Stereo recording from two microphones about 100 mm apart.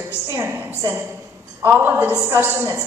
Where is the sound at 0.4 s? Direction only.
20° right (ahead or behind).